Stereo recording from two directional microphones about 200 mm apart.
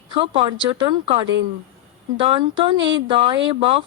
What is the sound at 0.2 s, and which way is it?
Speech, 30° right (ahead or behind).